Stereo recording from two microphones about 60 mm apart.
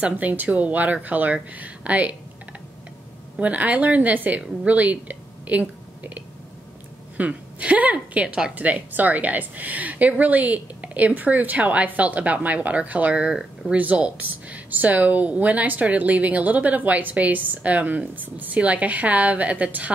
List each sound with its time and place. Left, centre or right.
0.0 s speech: right
3.3 s speech: right